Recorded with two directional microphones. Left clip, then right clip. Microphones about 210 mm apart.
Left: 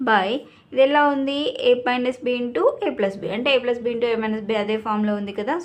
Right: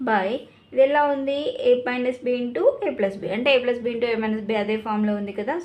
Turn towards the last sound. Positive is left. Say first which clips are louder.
# left 2 dB
turn(degrees=15)  # may be behind; listen again after turning